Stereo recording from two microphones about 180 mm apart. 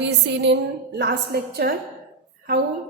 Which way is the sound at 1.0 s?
65° right (ahead or behind).